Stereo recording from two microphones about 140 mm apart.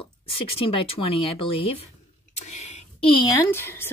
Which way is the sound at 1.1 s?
40° left (ahead or behind).